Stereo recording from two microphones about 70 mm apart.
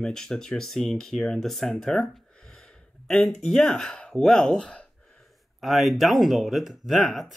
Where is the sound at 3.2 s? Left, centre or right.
Centre.